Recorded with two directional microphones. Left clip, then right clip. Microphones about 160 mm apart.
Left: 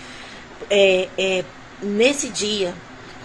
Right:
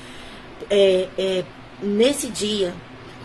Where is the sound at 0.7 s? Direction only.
20° right (ahead or behind).